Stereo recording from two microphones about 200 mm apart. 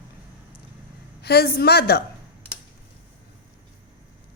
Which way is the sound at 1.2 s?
50° left (ahead or behind).